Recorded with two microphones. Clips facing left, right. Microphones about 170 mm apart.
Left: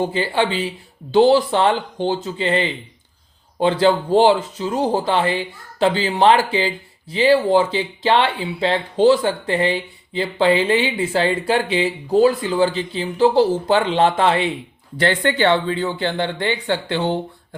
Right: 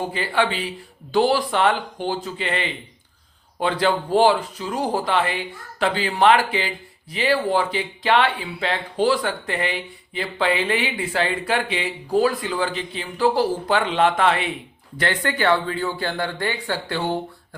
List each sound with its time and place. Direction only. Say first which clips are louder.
0.1 s speech: left 3 dB; 30° left (ahead or behind)